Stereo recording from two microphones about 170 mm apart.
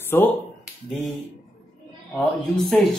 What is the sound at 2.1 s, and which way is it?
Speech, 5° left (ahead or behind).